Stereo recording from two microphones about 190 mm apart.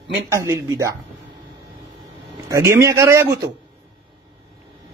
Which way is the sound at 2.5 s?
15° right (ahead or behind).